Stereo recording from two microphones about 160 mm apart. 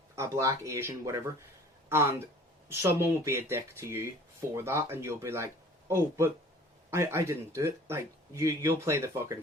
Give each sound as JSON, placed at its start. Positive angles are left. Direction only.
{"t": 0.2, "sound": "speech", "side_deg": -20}